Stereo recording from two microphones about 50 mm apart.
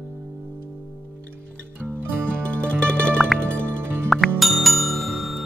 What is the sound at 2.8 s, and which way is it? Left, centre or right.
Music, centre.